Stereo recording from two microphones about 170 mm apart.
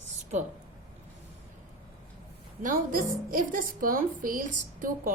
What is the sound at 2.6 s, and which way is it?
A woman's voice, 55° right (ahead or behind).